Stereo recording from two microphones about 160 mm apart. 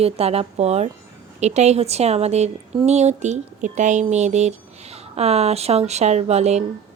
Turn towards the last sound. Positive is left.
turn(degrees=-45)  # may be behind; listen again after turning